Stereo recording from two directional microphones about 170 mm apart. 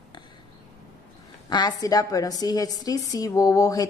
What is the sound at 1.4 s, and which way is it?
A woman's voice, 25° left (ahead or behind).